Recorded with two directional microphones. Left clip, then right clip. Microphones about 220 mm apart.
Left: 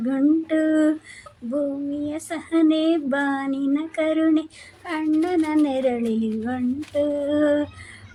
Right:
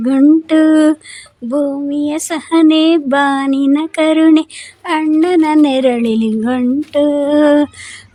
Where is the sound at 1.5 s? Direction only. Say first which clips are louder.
Right 9 dB; 55° right (ahead or behind).